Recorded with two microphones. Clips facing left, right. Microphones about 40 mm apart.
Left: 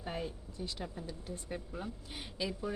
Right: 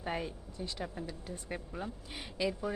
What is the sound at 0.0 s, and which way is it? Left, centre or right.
Speech, right.